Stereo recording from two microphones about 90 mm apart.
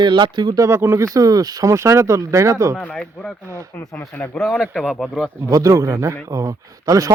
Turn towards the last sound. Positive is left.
turn(degrees=-40)  # may be behind; listen again after turning